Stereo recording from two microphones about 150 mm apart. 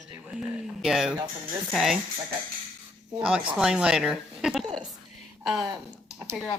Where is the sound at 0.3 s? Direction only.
5° right (ahead or behind).